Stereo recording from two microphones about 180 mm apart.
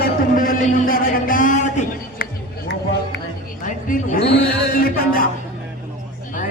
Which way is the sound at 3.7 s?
50° left (ahead or behind).